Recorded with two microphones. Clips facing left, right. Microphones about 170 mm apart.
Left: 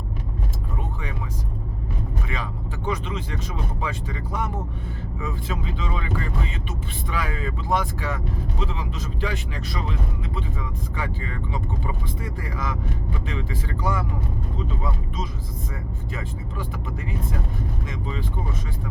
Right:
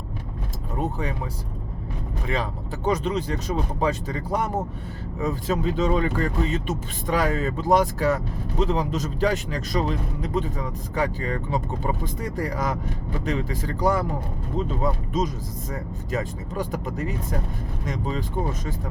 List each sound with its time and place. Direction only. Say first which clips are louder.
0.8 s vehicle: right 9 dB; 40° right (ahead or behind)
2.2 s speech: right 4 dB; 35° right (ahead or behind)